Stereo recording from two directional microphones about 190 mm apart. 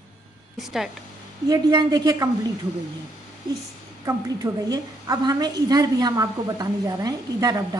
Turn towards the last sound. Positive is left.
turn(degrees=-20)  # may be behind; listen again after turning